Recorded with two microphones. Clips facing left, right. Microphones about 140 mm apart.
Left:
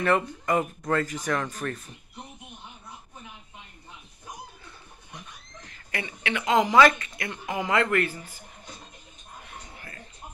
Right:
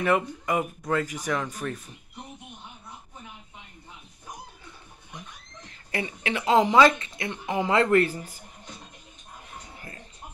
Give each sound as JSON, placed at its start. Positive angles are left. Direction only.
{"t": 0.0, "sound": "speech", "side_deg": -10}
{"t": 5.9, "sound": "speech", "side_deg": -35}
{"t": 9.5, "sound": "a sound", "side_deg": -30}